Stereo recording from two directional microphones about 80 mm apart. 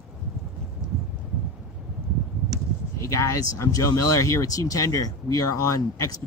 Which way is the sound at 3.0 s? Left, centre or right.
Left.